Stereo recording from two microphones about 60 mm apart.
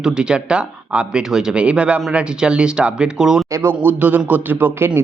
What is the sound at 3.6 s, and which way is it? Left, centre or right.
Speech, right.